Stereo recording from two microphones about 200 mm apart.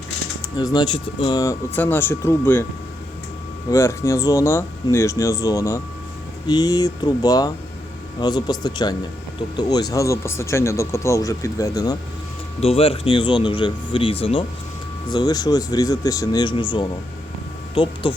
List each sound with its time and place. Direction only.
0.5 s speech: 20° left (ahead or behind)
3.7 s speech: 15° left (ahead or behind)
12.5 s speech: 30° left (ahead or behind)